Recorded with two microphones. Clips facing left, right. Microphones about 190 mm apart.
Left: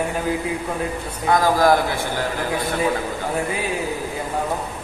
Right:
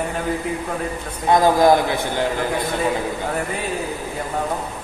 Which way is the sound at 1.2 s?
20° right (ahead or behind).